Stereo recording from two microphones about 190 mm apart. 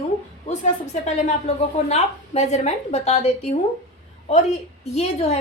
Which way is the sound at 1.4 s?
35° left (ahead or behind).